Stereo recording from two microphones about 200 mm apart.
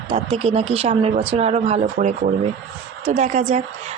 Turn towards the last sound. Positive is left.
turn(degrees=-35)  # may be behind; listen again after turning